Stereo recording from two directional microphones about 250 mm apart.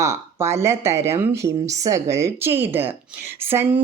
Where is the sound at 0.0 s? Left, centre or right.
Centre.